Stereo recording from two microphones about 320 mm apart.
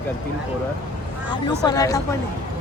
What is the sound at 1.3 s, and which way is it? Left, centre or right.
Speech, centre.